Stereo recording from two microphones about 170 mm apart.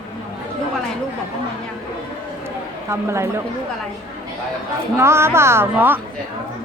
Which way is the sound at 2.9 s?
15° right (ahead or behind).